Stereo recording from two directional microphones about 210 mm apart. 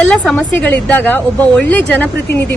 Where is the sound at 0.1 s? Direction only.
5° left (ahead or behind).